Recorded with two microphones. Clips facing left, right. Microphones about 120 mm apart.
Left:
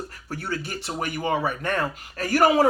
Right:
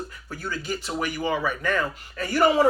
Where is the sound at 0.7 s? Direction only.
50° left (ahead or behind).